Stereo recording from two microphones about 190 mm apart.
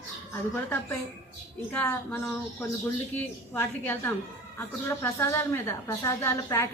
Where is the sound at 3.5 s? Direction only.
10° left (ahead or behind).